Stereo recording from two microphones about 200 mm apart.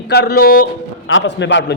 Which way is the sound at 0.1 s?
55° left (ahead or behind).